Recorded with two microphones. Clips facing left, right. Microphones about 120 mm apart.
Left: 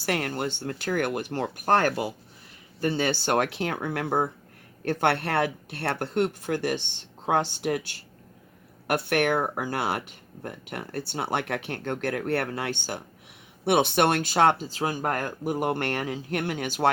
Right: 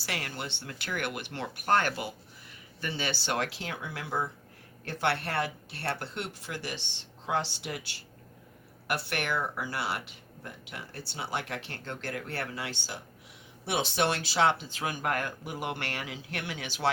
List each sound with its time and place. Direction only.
0.0 s speech: 50° left (ahead or behind)
14.7 s speech: 35° left (ahead or behind)